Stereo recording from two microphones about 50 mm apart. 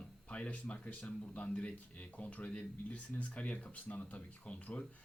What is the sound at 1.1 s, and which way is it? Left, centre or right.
Speech, left.